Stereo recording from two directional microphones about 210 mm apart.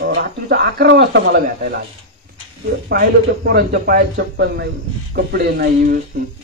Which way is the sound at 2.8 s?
50° right (ahead or behind).